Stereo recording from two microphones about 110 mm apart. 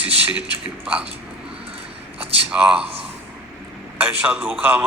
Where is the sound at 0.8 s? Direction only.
10° right (ahead or behind).